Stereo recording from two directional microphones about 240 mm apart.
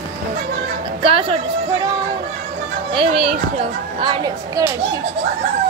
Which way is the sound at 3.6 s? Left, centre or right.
Centre.